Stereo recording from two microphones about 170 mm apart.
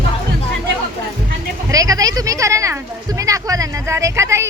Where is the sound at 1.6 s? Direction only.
20° right (ahead or behind).